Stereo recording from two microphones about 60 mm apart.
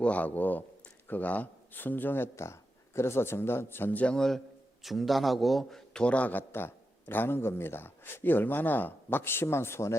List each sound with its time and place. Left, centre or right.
0.0 s speech: left
2.3 s a man's voice: left
3.9 s speech: centre
4.8 s a man's voice: centre
5.9 s speech: centre
6.5 s speech: left